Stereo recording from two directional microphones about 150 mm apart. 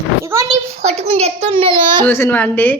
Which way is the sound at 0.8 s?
45° right (ahead or behind).